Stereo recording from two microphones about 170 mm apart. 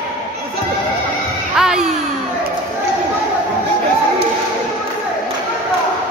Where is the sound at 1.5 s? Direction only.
5° right (ahead or behind).